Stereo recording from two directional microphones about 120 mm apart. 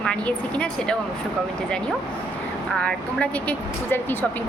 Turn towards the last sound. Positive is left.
turn(degrees=15)  # may be behind; listen again after turning